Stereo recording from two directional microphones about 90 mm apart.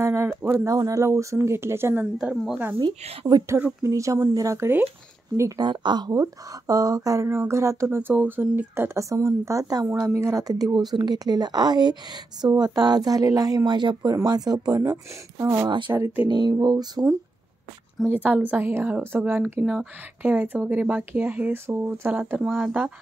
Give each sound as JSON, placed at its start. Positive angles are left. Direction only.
{"t": 0.0, "sound": "speech", "side_deg": -30}
{"t": 0.7, "sound": "speech", "side_deg": -40}
{"t": 2.1, "sound": "speech", "side_deg": -5}
{"t": 2.8, "sound": "a woman's voice", "side_deg": -50}
{"t": 3.8, "sound": "speech", "side_deg": -35}
{"t": 5.6, "sound": "a woman's voice", "side_deg": -55}
{"t": 9.8, "sound": "a woman's voice", "side_deg": -30}
{"t": 13.7, "sound": "a woman's voice", "side_deg": -55}
{"t": 18.0, "sound": "speech", "side_deg": -20}
{"t": 19.6, "sound": "speech", "side_deg": -10}
{"t": 22.3, "sound": "speech", "side_deg": -10}